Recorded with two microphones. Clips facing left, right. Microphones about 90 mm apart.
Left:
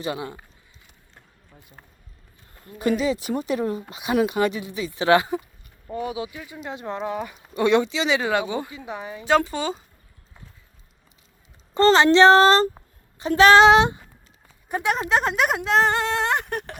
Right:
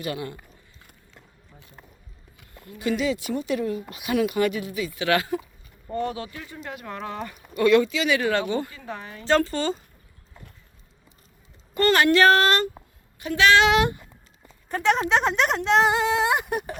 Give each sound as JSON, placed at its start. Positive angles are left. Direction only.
{"t": 0.0, "sound": "speech", "side_deg": 20}
{"t": 2.6, "sound": "speech", "side_deg": 40}
{"t": 5.9, "sound": "speech", "side_deg": 10}
{"t": 11.7, "sound": "speech", "side_deg": 25}
{"t": 14.9, "sound": "speech", "side_deg": 0}